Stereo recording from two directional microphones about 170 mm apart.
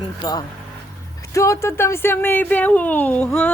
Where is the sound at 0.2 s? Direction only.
25° left (ahead or behind).